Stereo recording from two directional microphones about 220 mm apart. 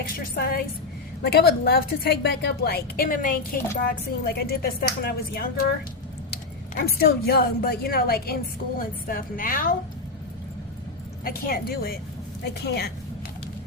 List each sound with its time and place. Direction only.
0.1 s a woman's voice: 40° left (ahead or behind)
6.7 s a woman's voice: 45° left (ahead or behind)
11.2 s a woman's voice: 40° left (ahead or behind)